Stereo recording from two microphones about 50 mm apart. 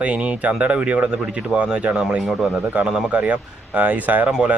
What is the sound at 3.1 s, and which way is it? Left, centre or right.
Speech, right.